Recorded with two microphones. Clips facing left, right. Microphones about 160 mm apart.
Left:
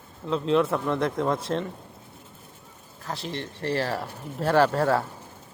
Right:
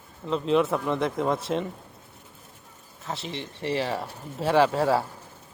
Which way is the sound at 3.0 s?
Centre (ahead or behind).